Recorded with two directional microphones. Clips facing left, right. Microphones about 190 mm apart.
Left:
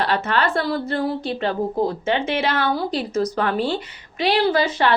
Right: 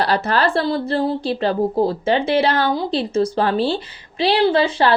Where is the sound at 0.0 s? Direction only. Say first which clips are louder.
Right 3 dB; 40° right (ahead or behind).